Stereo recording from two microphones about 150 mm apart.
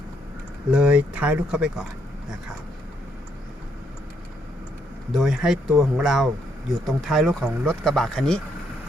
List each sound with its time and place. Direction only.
0.7 s speech: 5° right (ahead or behind)
5.1 s speech: centre (ahead or behind)